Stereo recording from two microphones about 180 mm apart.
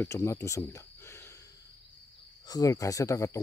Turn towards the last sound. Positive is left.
turn(degrees=15)  # may be behind; listen again after turning